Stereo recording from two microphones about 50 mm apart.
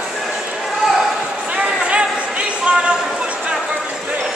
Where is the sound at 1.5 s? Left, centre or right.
Right.